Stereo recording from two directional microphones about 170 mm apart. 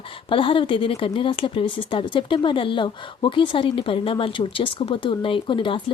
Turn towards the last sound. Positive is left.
turn(degrees=30)  # may be behind; listen again after turning